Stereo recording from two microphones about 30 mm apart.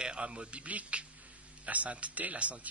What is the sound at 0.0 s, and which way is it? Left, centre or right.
Speech, right.